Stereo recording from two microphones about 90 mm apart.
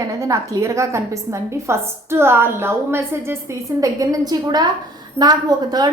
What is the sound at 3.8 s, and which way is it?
A woman's voice, 40° right (ahead or behind).